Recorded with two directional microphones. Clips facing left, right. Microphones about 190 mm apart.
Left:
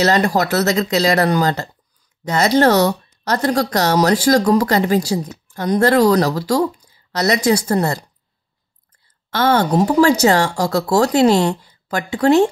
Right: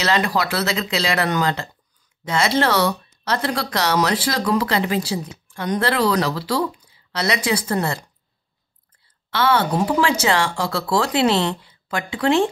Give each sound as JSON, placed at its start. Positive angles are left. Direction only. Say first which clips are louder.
{"t": 0.0, "sound": "a woman's voice", "louder": "left 5 dB", "side_deg": 45}
{"t": 9.3, "sound": "speech", "louder": "left 4 dB", "side_deg": 45}